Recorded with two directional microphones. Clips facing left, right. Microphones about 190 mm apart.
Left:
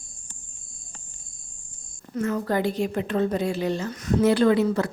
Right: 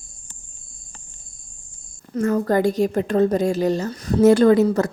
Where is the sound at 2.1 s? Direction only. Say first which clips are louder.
Right 6 dB; 45° right (ahead or behind).